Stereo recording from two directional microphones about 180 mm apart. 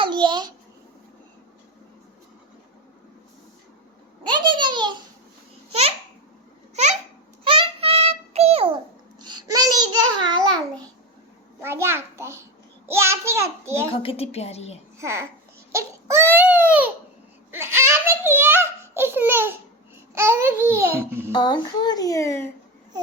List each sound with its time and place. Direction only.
0.0 s babbling: 25° right (ahead or behind)
4.3 s a sound: 25° right (ahead or behind)
7.4 s child singing: 30° right (ahead or behind)
9.2 s babbling: 20° right (ahead or behind)
11.6 s a sound: 15° right (ahead or behind)
14.0 s a woman's voice: 30° left (ahead or behind)
14.9 s a child's voice: 15° right (ahead or behind)
15.7 s baby cry: 15° right (ahead or behind)
17.5 s a sound: 15° right (ahead or behind)
20.1 s babbling: 15° right (ahead or behind)
21.3 s speech: 25° left (ahead or behind)